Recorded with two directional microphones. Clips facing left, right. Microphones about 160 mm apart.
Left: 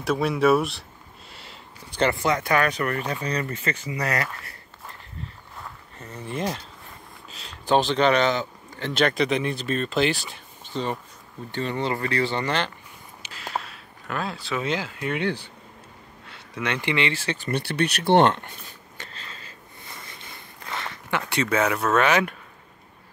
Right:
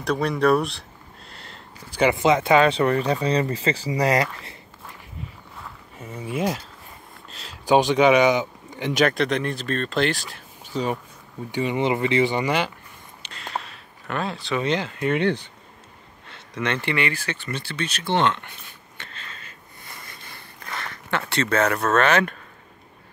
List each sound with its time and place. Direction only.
0.0 s speech: 5° left (ahead or behind)
1.3 s a sound: 5° left (ahead or behind)
1.9 s speech: 10° right (ahead or behind); by 4.2 s 30° right (ahead or behind)
5.6 s a sound: 5° right (ahead or behind)
7.2 s speech: centre (ahead or behind)
7.6 s speech: 10° right (ahead or behind)
9.0 s speech: centre (ahead or behind)
13.2 s speech: 5° left (ahead or behind)
16.5 s speech: 10° left (ahead or behind)
17.4 s a sound: 60° left (ahead or behind); by 21.2 s 20° left (ahead or behind)
21.3 s speech: 10° left (ahead or behind)